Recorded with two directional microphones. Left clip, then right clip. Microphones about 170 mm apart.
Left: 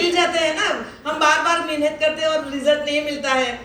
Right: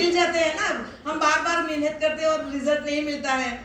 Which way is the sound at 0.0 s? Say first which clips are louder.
Left 3 dB; 40° left (ahead or behind).